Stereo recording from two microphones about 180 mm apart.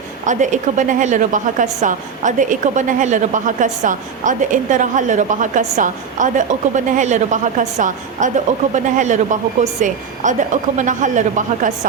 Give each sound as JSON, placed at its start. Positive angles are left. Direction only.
{"t": 0.3, "sound": "a woman's voice", "side_deg": -45}